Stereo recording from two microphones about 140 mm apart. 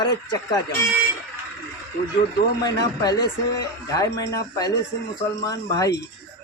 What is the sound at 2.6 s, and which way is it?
Speech, 25° left (ahead or behind).